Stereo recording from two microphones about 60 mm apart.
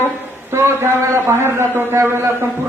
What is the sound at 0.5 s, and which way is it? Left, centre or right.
A man's voice, right.